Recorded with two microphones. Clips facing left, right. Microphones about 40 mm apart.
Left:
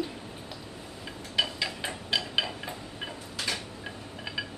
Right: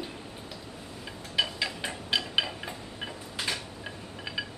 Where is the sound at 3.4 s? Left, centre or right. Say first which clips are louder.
Even; right.